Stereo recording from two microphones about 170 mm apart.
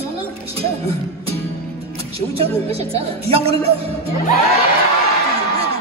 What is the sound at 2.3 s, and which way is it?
Music, 35° right (ahead or behind).